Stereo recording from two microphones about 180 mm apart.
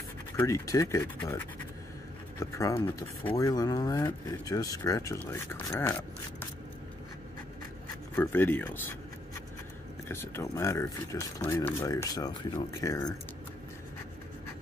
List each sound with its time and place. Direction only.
0.4 s speech: 15° left (ahead or behind)
2.5 s speech: 15° left (ahead or behind)
8.2 s speech: 10° left (ahead or behind)
10.0 s speech: 15° left (ahead or behind)